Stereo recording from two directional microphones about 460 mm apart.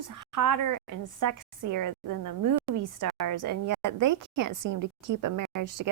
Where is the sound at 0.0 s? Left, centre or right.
Right.